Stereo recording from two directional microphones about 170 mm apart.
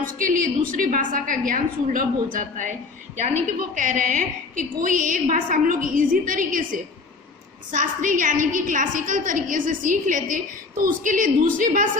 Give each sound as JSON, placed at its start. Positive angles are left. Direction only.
{"t": 0.0, "sound": "a woman's voice", "side_deg": -55}